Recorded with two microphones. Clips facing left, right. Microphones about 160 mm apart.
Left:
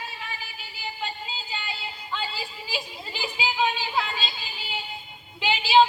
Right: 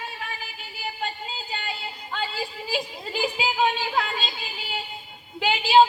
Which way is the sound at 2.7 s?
45° right (ahead or behind).